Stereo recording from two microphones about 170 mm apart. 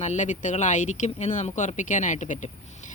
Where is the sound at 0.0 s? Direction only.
45° left (ahead or behind).